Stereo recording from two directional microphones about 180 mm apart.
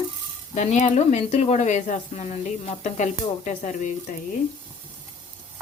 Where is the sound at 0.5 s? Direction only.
40° left (ahead or behind).